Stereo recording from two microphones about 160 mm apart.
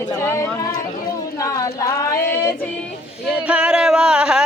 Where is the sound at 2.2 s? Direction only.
15° left (ahead or behind).